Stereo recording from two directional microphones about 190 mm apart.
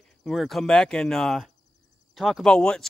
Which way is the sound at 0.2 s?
Centre (ahead or behind).